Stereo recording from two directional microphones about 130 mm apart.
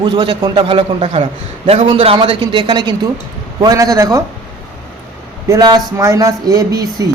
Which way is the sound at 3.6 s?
25° right (ahead or behind).